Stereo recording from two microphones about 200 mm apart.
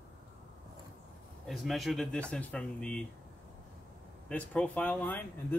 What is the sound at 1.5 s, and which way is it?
Speech, centre (ahead or behind).